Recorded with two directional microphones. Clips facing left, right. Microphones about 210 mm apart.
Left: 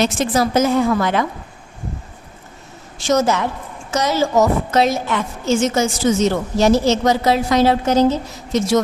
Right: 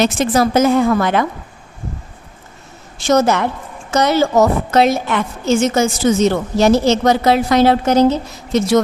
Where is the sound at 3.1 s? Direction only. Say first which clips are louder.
Right 3 dB; 60° right (ahead or behind).